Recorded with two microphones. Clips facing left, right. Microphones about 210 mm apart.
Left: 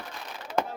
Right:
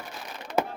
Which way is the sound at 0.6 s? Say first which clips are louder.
Right 2 dB; 5° right (ahead or behind).